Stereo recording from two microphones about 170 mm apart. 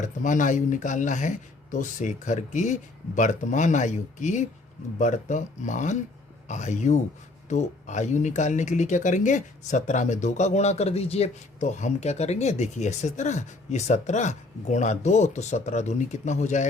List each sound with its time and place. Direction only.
0.0 s speech: 50° left (ahead or behind)